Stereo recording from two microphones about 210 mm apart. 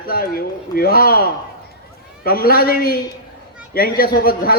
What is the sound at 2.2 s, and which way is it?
A man's voice, 45° left (ahead or behind).